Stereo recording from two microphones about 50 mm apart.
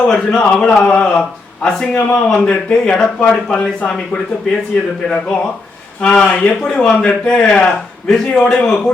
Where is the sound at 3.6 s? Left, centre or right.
Left.